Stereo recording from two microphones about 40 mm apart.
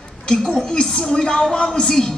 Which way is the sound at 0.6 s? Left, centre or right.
Centre.